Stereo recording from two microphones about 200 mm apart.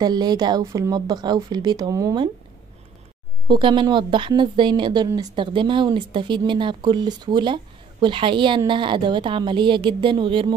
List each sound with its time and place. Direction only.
0.0 s a woman's voice: 20° right (ahead or behind)
3.4 s a woman's voice: 25° right (ahead or behind)